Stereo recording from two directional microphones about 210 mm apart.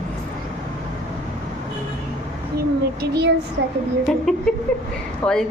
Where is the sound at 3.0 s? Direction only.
50° right (ahead or behind).